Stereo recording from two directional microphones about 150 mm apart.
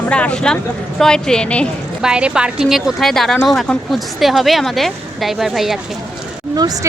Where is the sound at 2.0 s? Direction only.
5° right (ahead or behind).